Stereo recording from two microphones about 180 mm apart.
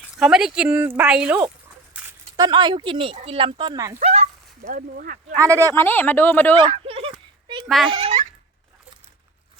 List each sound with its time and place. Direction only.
0.2 s speech: 5° right (ahead or behind)
2.0 s speech: 20° right (ahead or behind)
4.0 s bow-wow: 35° right (ahead or behind)
4.6 s speech: 50° right (ahead or behind)
5.4 s speech: 15° right (ahead or behind)
5.7 s speech: 10° left (ahead or behind)
6.6 s a sound: 30° right (ahead or behind)
7.9 s speech: 30° right (ahead or behind)